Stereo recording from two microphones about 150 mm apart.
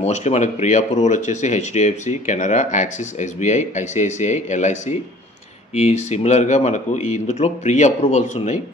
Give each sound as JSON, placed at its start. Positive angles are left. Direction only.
{"t": 0.0, "sound": "speech", "side_deg": 50}